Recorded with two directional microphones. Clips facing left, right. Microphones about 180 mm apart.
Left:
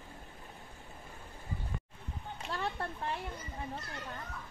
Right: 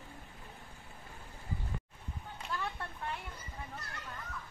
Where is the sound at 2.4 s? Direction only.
30° left (ahead or behind).